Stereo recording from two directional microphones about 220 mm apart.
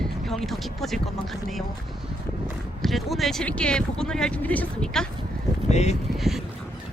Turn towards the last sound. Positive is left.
turn(degrees=0)  # may be behind; listen again after turning